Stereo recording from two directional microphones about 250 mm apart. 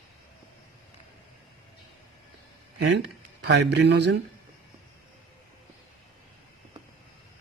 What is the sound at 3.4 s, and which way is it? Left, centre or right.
Speech, right.